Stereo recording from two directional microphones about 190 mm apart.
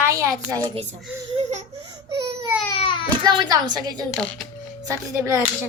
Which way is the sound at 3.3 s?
20° right (ahead or behind).